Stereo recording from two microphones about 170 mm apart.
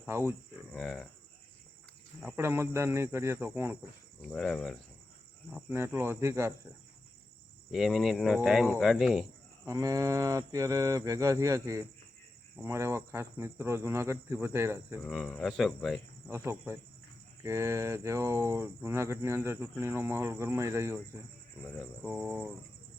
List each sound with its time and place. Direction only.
0.0 s speech: 15° right (ahead or behind)
0.7 s speech: centre (ahead or behind)
2.2 s speech: 15° right (ahead or behind)
4.2 s speech: centre (ahead or behind)
5.5 s speech: 10° right (ahead or behind)
7.7 s speech: centre (ahead or behind)
9.6 s a sound: 20° right (ahead or behind)
12.6 s speech: 15° right (ahead or behind)
15.0 s speech: centre (ahead or behind)
16.3 s speech: 15° right (ahead or behind)